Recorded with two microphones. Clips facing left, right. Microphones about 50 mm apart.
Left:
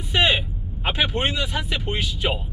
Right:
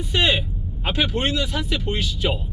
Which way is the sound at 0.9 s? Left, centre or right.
Centre.